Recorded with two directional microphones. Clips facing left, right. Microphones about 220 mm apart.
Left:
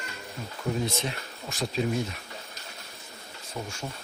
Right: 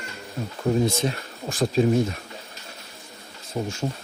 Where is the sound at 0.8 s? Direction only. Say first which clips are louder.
Right 7 dB; 45° right (ahead or behind).